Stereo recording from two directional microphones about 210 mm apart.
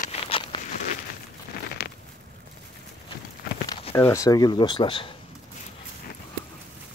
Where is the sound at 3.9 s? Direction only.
10° left (ahead or behind).